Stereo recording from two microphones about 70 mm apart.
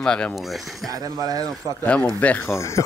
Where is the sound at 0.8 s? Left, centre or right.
Right.